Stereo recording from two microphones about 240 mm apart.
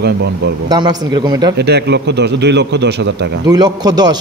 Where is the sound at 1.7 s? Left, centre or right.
Right.